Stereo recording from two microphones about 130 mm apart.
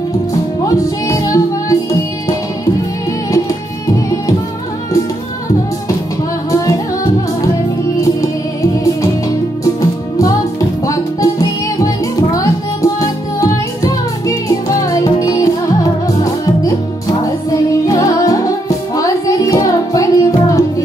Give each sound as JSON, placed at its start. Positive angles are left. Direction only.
{"t": 0.7, "sound": "music", "side_deg": 25}
{"t": 6.5, "sound": "music", "side_deg": 25}
{"t": 9.8, "sound": "music", "side_deg": 25}